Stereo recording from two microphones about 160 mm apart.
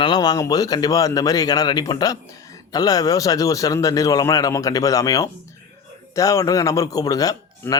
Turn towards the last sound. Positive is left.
turn(degrees=20)  # may be behind; listen again after turning